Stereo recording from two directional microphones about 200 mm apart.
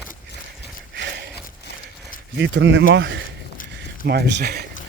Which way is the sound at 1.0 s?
60° right (ahead or behind).